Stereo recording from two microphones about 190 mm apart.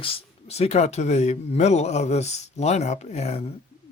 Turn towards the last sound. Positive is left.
turn(degrees=35)  # may be behind; listen again after turning